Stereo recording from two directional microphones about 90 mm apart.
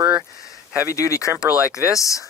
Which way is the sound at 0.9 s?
35° left (ahead or behind).